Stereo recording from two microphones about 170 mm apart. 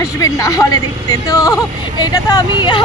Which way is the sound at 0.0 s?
20° left (ahead or behind).